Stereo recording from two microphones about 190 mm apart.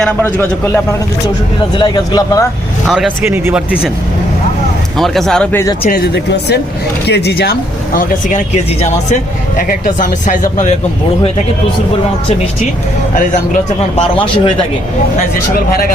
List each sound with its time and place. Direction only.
0.0 s a man's voice: 10° left (ahead or behind)
1.7 s speech: 20° left (ahead or behind)
2.8 s speech: 5° right (ahead or behind)
4.9 s speech: centre (ahead or behind)
5.9 s speech: 60° left (ahead or behind)
9.6 s speech: 45° left (ahead or behind)
13.9 s speech: 30° left (ahead or behind)